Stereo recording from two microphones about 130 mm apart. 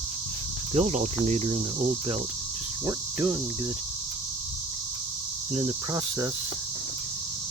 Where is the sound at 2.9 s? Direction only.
25° right (ahead or behind).